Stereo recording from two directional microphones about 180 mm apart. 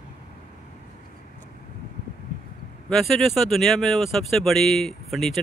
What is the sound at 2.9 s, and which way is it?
Speech, centre (ahead or behind).